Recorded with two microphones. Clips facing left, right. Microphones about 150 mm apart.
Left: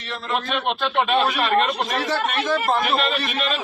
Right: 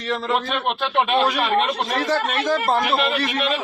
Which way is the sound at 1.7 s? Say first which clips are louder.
Right 2 dB; 5° left (ahead or behind).